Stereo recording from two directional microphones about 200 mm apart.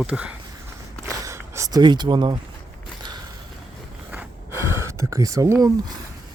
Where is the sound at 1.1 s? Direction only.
15° right (ahead or behind).